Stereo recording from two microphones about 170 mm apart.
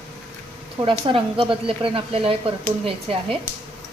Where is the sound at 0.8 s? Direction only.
30° right (ahead or behind).